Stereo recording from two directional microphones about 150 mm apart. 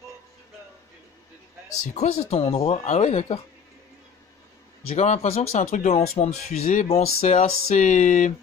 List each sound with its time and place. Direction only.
2.0 s speech: 45° left (ahead or behind)
4.8 s speech: 50° left (ahead or behind)